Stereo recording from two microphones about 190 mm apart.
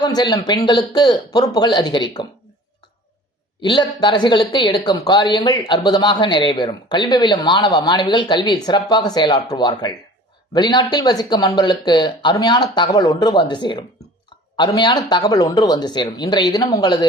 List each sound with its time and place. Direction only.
0.0 s speech: 20° left (ahead or behind)
3.7 s speech: 25° left (ahead or behind)